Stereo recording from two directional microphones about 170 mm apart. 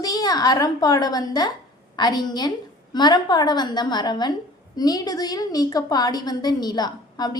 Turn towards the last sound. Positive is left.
turn(degrees=25)  # may be behind; listen again after turning